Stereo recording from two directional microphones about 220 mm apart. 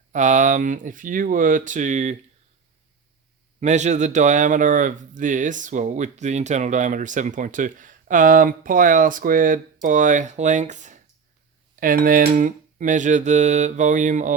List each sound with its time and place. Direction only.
0.1 s speech: 35° right (ahead or behind)
3.6 s speech: 30° right (ahead or behind)